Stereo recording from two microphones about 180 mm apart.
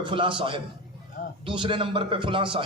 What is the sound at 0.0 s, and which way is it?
A man's voice, 25° right (ahead or behind).